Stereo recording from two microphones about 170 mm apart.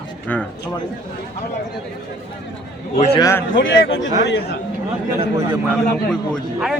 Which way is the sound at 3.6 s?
90° left.